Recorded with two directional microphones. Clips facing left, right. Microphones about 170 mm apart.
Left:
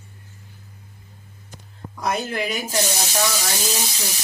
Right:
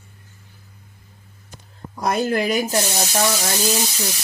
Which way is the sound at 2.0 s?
45° right (ahead or behind).